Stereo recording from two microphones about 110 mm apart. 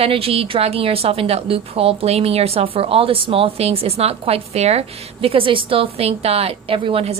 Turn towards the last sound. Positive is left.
turn(degrees=-55)  # may be behind; listen again after turning